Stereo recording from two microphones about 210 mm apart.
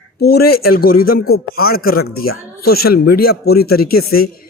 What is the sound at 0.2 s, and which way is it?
Speech, 50° left (ahead or behind).